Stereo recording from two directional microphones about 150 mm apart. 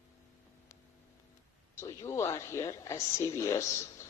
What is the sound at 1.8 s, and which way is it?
A woman's voice, 20° left (ahead or behind).